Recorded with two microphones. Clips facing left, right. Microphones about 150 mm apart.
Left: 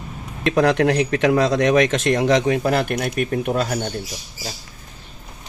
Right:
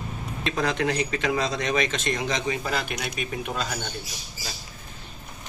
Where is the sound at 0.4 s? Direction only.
65° left (ahead or behind).